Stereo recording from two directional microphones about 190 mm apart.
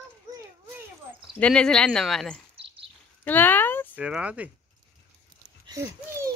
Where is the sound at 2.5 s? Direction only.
30° right (ahead or behind).